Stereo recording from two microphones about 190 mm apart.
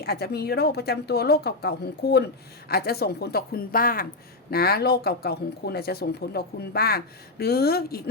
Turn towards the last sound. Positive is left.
turn(degrees=55)  # may be behind; listen again after turning